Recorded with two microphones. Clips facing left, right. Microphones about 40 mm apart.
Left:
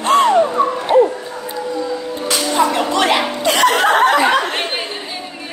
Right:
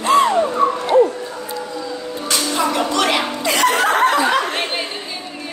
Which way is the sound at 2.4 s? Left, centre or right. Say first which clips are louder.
Left 4 dB; centre.